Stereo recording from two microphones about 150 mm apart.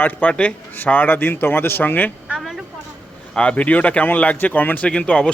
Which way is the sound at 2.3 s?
Centre (ahead or behind).